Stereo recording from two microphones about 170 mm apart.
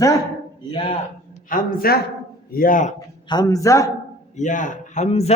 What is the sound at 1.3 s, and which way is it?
A man's voice, 55° left (ahead or behind).